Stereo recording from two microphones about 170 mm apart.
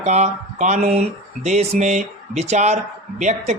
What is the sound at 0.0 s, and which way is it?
Speech, 40° right (ahead or behind).